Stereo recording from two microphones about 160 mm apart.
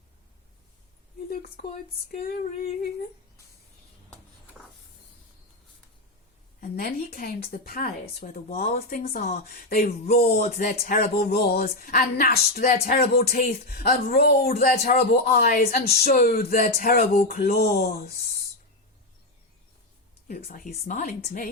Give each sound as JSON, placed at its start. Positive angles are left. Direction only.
{"t": 1.3, "sound": "speech", "side_deg": 65}
{"t": 6.6, "sound": "speech", "side_deg": 65}
{"t": 20.2, "sound": "speech", "side_deg": 60}